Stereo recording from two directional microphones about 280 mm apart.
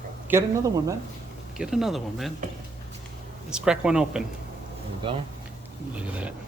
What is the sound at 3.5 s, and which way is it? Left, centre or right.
Speech, centre.